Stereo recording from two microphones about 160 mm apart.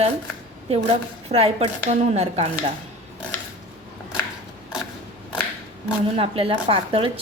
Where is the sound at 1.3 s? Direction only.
40° right (ahead or behind).